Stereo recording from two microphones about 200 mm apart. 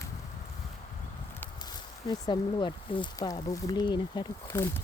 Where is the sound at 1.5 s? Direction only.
20° left (ahead or behind).